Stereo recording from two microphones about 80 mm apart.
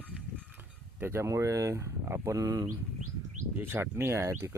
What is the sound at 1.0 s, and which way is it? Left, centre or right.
Speech, right.